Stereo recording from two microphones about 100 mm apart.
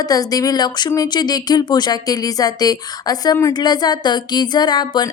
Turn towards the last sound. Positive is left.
turn(degrees=45)  # may be behind; listen again after turning